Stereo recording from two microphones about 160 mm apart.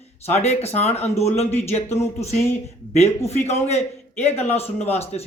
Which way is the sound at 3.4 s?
40° left (ahead or behind).